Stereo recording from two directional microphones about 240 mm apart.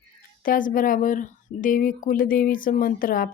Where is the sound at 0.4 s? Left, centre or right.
Left.